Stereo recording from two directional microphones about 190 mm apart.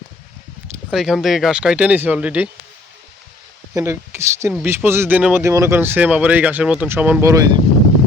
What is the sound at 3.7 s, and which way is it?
Speech, 15° right (ahead or behind).